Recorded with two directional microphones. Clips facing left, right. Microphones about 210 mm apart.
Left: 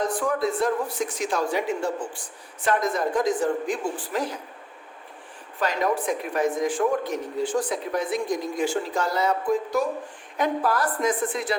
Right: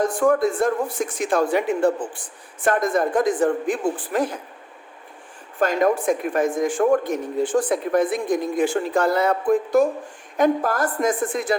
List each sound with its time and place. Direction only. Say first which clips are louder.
0.0 s speech: right 6 dB; 50° right (ahead or behind)
5.5 s speech: right 5 dB; 50° right (ahead or behind)